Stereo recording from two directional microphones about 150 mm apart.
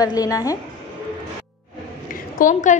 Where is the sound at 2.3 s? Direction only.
60° left (ahead or behind).